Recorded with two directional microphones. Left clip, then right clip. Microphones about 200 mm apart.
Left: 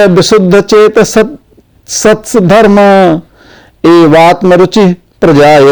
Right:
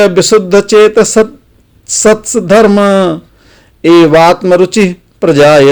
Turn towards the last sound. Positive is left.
turn(degrees=25)  # may be behind; listen again after turning